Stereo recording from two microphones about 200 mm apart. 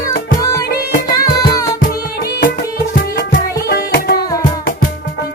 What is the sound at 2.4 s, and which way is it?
Music, 50° left (ahead or behind).